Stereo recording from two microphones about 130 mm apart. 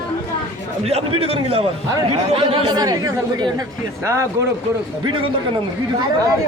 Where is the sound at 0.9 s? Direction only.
50° right (ahead or behind).